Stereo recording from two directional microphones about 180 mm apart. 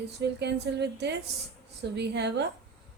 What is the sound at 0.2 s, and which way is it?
Speech, 70° right (ahead or behind).